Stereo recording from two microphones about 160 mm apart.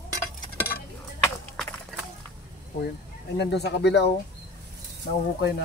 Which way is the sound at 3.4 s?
90° left.